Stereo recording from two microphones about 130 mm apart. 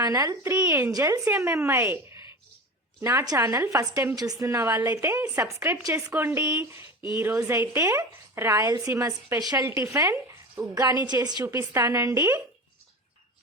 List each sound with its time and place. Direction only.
0.0 s a woman's voice: 30° right (ahead or behind)